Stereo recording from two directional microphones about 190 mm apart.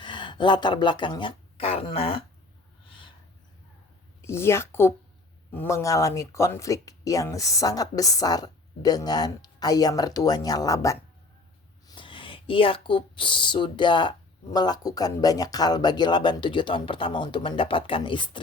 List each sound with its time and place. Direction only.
0.0 s speech: 25° left (ahead or behind)
4.2 s speech: 15° left (ahead or behind)